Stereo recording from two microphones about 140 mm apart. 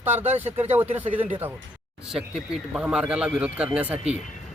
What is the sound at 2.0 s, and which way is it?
Speech, 5° right (ahead or behind).